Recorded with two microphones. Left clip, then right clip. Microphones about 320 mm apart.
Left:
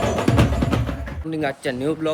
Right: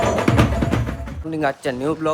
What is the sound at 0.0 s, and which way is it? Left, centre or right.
Music, right.